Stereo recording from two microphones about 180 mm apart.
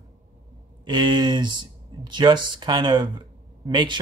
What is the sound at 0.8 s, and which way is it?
Speech, 25° right (ahead or behind).